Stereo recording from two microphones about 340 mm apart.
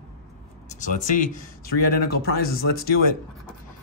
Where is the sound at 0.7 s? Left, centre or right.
Left.